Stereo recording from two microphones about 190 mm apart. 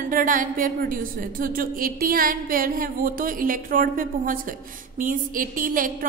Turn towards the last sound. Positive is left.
turn(degrees=-45)  # may be behind; listen again after turning